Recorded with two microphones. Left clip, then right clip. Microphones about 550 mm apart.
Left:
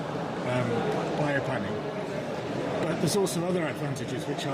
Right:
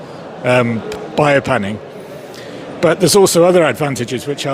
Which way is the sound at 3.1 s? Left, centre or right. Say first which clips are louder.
Right 18 dB; right.